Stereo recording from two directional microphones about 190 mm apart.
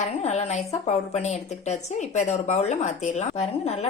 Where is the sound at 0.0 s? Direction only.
35° left (ahead or behind).